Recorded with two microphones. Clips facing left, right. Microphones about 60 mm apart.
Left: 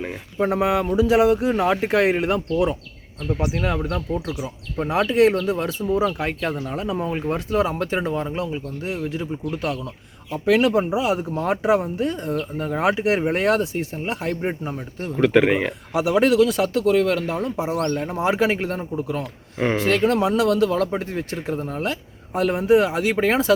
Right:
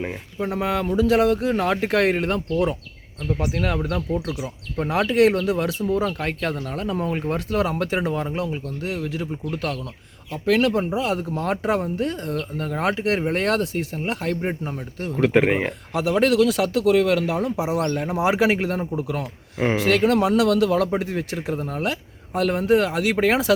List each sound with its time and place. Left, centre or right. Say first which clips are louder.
0.3 s speech: left 4 dB; left; by 2.7 s centre
3.2 s speech: left 1 dB; centre
8.6 s speech: even; centre
10.3 s speech: left 2 dB; centre
15.3 s speech: left 2 dB; centre
15.9 s speech: left 2 dB; centre